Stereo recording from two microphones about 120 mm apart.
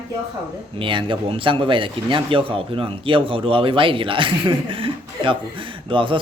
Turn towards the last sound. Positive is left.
turn(degrees=-45)  # may be behind; listen again after turning